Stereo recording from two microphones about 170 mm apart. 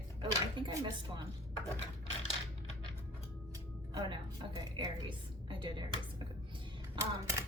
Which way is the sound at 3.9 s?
25° right (ahead or behind).